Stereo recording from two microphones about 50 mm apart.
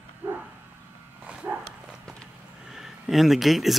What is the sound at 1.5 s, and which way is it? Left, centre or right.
Horse, right.